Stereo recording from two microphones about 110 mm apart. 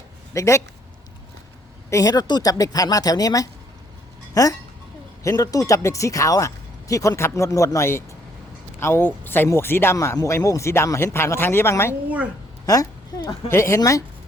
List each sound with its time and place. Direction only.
0.3 s speech: 25° left (ahead or behind)
1.9 s a woman's voice: 35° left (ahead or behind)